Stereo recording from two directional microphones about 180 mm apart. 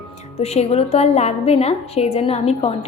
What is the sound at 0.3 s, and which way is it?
A woman's voice, 35° left (ahead or behind).